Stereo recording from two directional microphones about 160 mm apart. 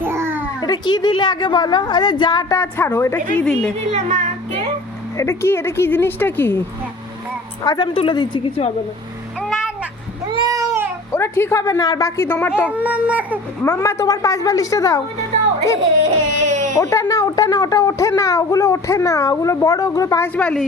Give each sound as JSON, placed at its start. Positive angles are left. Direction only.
{"t": 0.0, "sound": "a sound", "side_deg": -15}
{"t": 0.6, "sound": "speech", "side_deg": 25}
{"t": 3.3, "sound": "a woman's voice", "side_deg": 5}
{"t": 3.9, "sound": "speech", "side_deg": -45}
{"t": 5.1, "sound": "a woman's voice", "side_deg": 15}
{"t": 7.6, "sound": "speech", "side_deg": 25}
{"t": 10.3, "sound": "cat", "side_deg": -20}
{"t": 11.1, "sound": "a woman's voice", "side_deg": 15}
{"t": 12.7, "sound": "a sound", "side_deg": -10}
{"t": 13.6, "sound": "speech", "side_deg": 15}
{"t": 16.4, "sound": "baby cry", "side_deg": -50}
{"t": 16.7, "sound": "speech", "side_deg": 20}
{"t": 20.3, "sound": "a woman's voice", "side_deg": 5}